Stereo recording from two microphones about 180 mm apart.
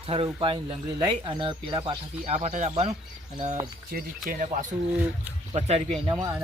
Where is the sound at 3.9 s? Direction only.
45° right (ahead or behind).